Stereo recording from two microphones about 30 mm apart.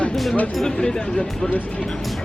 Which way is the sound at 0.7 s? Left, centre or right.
Left.